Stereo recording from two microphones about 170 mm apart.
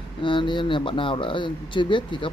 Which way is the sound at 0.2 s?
30° left (ahead or behind).